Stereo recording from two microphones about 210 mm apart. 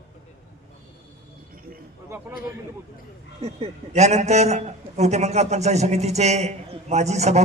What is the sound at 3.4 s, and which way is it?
A man's voice, 30° right (ahead or behind).